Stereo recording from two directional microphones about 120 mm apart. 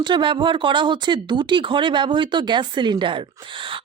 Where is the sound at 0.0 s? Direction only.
40° right (ahead or behind).